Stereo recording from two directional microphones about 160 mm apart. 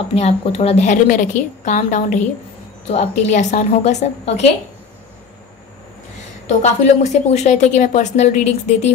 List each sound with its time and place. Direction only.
0.1 s a woman's voice: 40° left (ahead or behind)
6.6 s a woman's voice: 45° left (ahead or behind)